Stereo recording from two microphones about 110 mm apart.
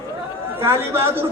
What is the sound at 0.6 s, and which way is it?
Speech, 20° right (ahead or behind).